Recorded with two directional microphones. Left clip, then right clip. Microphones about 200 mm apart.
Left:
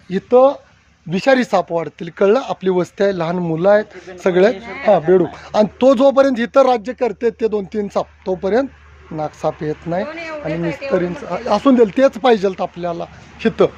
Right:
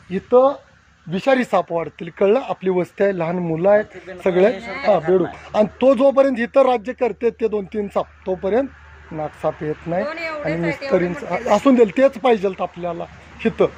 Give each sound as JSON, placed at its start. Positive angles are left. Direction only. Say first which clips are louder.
{"t": 0.1, "sound": "speech", "louder": "left 3 dB", "side_deg": 30}
{"t": 10.5, "sound": "speech", "louder": "left 3 dB", "side_deg": -25}
{"t": 10.9, "sound": "speech", "louder": "even", "side_deg": 0}
{"t": 11.6, "sound": "speech", "louder": "left 3 dB", "side_deg": 15}